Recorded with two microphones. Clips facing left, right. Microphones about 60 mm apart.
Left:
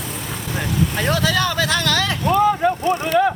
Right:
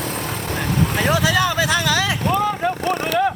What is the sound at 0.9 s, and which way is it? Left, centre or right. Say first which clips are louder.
Speech: right 2 dB; centre.